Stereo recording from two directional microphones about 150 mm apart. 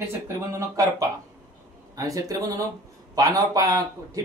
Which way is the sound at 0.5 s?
20° right (ahead or behind).